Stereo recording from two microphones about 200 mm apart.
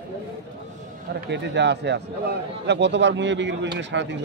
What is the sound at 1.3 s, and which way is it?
Speech, 60° right (ahead or behind).